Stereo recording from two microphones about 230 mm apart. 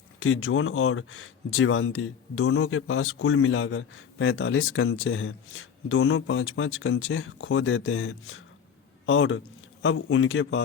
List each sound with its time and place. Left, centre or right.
0.2 s speech: left